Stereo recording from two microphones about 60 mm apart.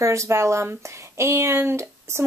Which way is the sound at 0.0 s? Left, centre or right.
Right.